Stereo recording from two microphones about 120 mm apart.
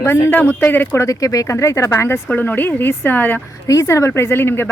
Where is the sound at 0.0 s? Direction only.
20° left (ahead or behind).